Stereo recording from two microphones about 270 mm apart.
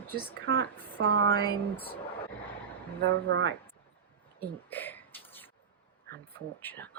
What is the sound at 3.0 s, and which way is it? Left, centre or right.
Speech, right.